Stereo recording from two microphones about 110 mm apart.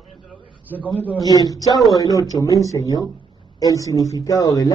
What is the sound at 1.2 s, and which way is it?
Speech, 30° left (ahead or behind).